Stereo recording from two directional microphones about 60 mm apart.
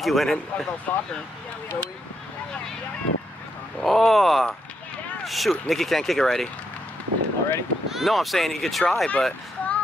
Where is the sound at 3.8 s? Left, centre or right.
Centre.